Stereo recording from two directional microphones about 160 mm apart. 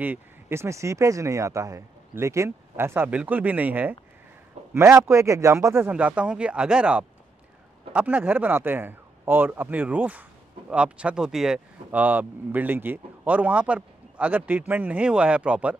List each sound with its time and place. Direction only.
0.0 s speech: 15° right (ahead or behind)